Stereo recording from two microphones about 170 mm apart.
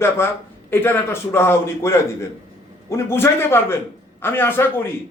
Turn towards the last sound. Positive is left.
turn(degrees=10)  # may be behind; listen again after turning